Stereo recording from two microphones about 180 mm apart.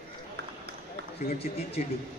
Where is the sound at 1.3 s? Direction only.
35° left (ahead or behind).